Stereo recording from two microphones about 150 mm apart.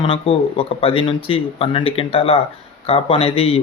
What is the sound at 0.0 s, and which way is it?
Speech, 35° left (ahead or behind).